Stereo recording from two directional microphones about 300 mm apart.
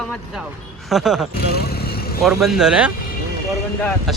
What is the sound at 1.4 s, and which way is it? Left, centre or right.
Vehicle, left.